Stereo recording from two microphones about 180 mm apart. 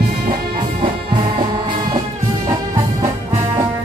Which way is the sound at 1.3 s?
25° right (ahead or behind).